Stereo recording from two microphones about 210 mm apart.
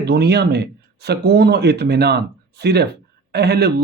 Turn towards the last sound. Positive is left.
turn(degrees=-50)  # may be behind; listen again after turning